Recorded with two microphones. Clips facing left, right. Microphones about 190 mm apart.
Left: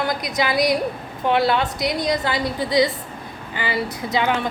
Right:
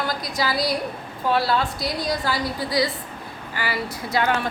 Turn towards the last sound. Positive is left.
turn(degrees=20)  # may be behind; listen again after turning